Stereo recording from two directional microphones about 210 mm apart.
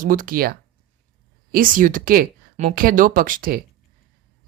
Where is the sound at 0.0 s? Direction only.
40° right (ahead or behind).